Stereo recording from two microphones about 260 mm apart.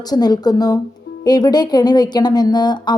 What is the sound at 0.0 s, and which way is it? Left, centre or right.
Speech, centre.